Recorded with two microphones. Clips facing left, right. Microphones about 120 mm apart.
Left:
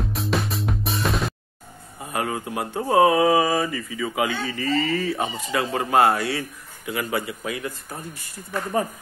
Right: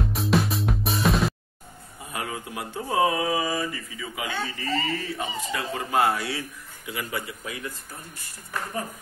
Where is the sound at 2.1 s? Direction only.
55° left (ahead or behind); by 4.3 s 75° left (ahead or behind).